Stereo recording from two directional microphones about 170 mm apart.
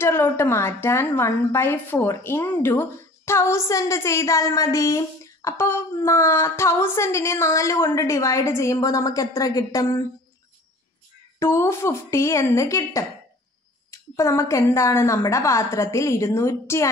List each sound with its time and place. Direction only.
0.0 s a woman's voice: 15° left (ahead or behind)
11.3 s a woman's voice: 15° left (ahead or behind)